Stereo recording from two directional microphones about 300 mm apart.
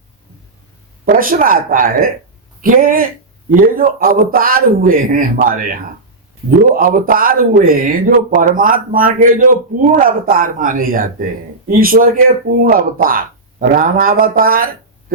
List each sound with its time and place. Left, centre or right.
1.0 s speech: right